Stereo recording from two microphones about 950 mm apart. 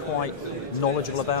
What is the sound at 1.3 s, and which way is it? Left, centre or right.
Speech, left.